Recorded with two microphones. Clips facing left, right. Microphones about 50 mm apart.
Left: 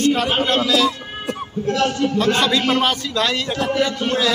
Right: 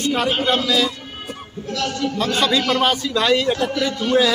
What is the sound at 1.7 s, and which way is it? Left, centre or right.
Speech, left.